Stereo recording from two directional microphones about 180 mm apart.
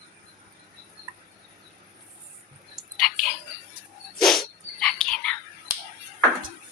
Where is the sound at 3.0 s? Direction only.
Centre (ahead or behind).